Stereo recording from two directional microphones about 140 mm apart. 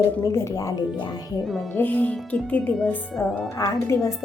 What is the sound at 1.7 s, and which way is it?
Speech, 10° left (ahead or behind).